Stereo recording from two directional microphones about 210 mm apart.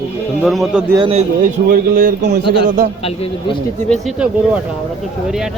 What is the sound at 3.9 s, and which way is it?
Speech, 5° right (ahead or behind).